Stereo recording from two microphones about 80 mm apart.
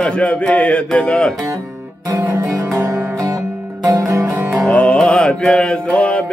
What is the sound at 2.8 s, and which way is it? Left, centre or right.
Music, right.